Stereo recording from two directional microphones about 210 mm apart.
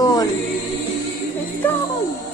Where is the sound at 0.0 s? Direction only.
20° left (ahead or behind).